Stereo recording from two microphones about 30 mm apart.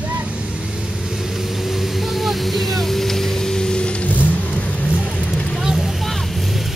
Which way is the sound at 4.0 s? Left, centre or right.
Left.